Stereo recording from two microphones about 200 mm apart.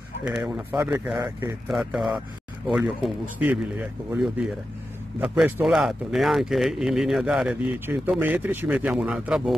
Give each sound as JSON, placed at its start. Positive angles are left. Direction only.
{"t": 0.6, "sound": "speech", "side_deg": -10}
{"t": 1.7, "sound": "speech", "side_deg": 0}
{"t": 5.2, "sound": "speech", "side_deg": -5}